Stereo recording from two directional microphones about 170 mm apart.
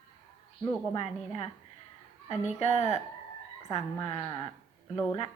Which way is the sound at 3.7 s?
30° left (ahead or behind).